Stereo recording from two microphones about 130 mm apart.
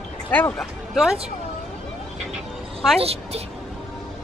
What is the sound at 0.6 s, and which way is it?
Speech, centre (ahead or behind).